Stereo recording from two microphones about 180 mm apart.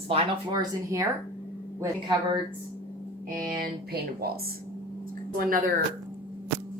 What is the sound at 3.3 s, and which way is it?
Speech, 50° right (ahead or behind).